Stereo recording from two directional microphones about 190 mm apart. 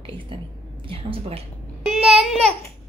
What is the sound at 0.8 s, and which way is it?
Speech, 30° right (ahead or behind).